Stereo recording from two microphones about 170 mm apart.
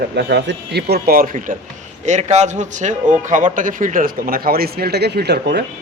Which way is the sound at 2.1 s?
40° right (ahead or behind).